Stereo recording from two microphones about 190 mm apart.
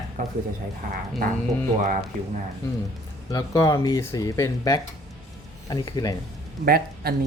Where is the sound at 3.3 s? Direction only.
20° left (ahead or behind).